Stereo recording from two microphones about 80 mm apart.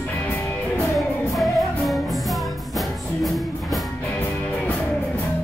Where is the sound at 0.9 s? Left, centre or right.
Centre.